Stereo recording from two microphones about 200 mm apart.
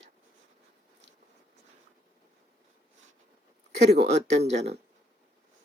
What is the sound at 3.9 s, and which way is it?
Speech, 35° right (ahead or behind).